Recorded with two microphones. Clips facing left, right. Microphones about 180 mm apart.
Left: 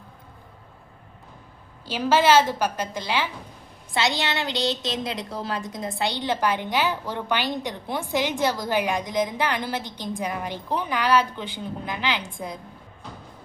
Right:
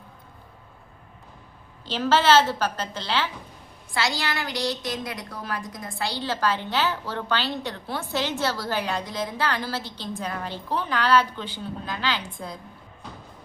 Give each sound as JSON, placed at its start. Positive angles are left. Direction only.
{"t": 1.8, "sound": "a woman's voice", "side_deg": 10}